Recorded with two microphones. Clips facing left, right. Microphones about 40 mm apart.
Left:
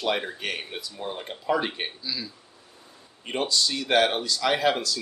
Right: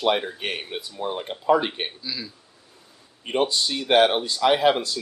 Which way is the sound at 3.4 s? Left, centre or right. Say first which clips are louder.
Right 3 dB; right.